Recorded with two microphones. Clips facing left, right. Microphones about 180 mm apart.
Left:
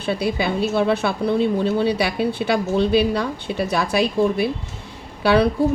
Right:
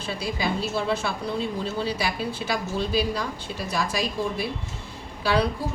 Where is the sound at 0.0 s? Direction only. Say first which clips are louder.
Left 7 dB; 65° left (ahead or behind).